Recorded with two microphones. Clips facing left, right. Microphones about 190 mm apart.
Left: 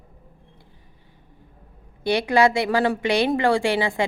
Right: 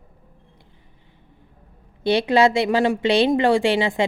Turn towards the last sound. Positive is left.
turn(degrees=-20)  # may be behind; listen again after turning